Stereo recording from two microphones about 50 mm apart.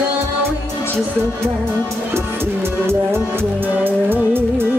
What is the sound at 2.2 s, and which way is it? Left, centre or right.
Music, right.